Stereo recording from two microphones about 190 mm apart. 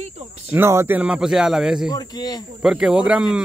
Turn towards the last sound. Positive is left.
turn(degrees=-5)  # may be behind; listen again after turning